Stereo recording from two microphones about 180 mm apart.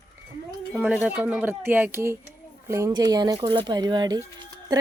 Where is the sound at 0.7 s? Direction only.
5° right (ahead or behind); by 4.2 s 20° right (ahead or behind).